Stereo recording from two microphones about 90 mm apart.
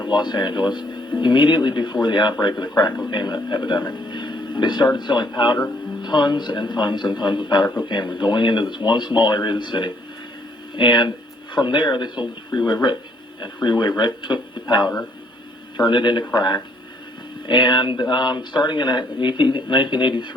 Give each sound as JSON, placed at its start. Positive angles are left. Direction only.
{"t": 0.0, "sound": "speech", "side_deg": 55}